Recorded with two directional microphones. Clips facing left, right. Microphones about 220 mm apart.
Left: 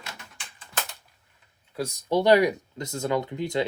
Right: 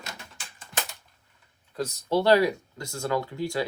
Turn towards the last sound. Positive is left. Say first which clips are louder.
# left 2 dB
turn(degrees=20)  # may be behind; listen again after turning